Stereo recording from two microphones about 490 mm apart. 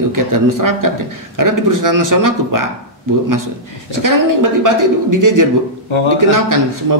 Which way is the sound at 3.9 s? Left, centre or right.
Right.